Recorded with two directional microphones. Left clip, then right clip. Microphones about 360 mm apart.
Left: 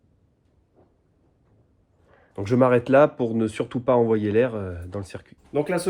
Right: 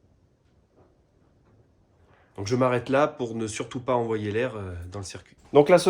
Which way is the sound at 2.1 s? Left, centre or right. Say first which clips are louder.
Left 3 dB; centre.